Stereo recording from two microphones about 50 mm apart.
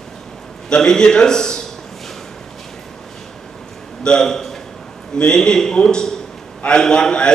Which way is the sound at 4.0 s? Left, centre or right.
Centre.